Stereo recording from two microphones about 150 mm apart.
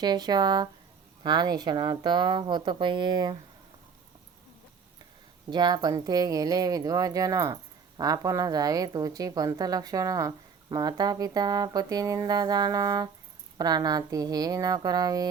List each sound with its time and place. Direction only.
0.0 s speech: 30° right (ahead or behind)
5.5 s speech: 30° right (ahead or behind)